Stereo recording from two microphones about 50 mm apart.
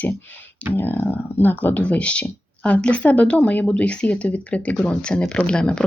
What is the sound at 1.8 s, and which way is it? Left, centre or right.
Speech, left.